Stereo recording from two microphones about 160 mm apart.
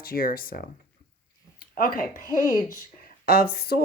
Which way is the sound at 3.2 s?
70° left (ahead or behind).